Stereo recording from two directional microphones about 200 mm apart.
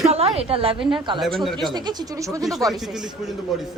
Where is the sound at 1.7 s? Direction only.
20° right (ahead or behind).